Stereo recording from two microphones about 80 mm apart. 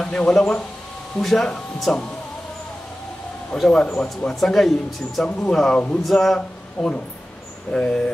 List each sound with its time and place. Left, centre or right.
0.0 s speech: centre
3.5 s speech: centre